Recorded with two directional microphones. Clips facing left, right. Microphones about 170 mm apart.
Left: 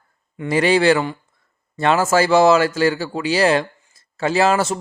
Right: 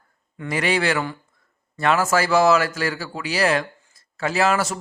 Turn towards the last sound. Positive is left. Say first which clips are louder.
# left 4 dB
turn(degrees=25)  # may be behind; listen again after turning